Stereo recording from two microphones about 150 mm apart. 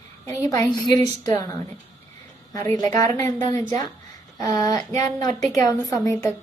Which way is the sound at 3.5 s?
55° right (ahead or behind).